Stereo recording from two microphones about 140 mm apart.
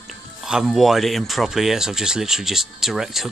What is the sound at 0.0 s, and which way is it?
Speech, 5° right (ahead or behind).